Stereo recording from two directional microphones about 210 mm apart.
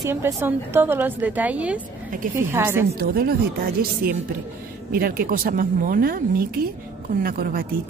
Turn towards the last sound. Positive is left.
turn(degrees=-45)  # may be behind; listen again after turning